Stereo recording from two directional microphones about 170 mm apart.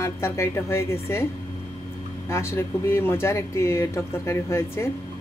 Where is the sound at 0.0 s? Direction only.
15° left (ahead or behind).